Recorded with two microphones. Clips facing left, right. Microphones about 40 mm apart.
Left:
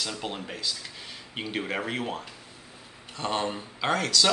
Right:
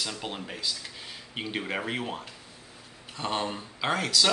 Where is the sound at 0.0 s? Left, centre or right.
Centre.